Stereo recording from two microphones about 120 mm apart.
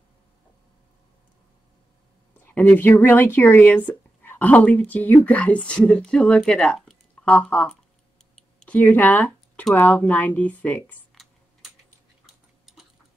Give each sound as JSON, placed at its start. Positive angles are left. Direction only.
{"t": 2.5, "sound": "speech", "side_deg": 15}
{"t": 8.4, "sound": "a sound", "side_deg": 10}
{"t": 9.8, "sound": "speech", "side_deg": 20}